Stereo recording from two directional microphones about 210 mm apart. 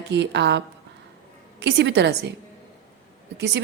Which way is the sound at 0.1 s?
55° right (ahead or behind).